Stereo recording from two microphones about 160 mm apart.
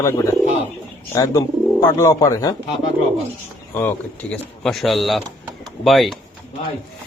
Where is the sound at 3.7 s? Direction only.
10° left (ahead or behind).